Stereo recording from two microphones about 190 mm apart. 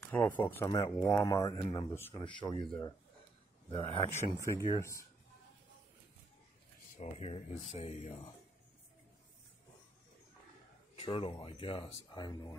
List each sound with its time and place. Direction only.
0.0 s a sound: 10° left (ahead or behind)
0.4 s speech: 10° left (ahead or behind)
0.7 s speech: 25° left (ahead or behind)
0.9 s speech: 10° left (ahead or behind)
3.7 s speech: 30° left (ahead or behind)
4.2 s speech: 15° left (ahead or behind)
7.0 s speech: 30° left (ahead or behind)
11.0 s speech: 30° left (ahead or behind)